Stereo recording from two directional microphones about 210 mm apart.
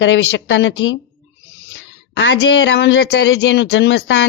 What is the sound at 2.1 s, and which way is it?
Speech, 55° left (ahead or behind).